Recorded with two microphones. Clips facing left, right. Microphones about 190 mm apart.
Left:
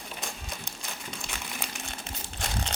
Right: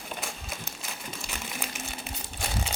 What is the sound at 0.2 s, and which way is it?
Crumpling, 5° right (ahead or behind).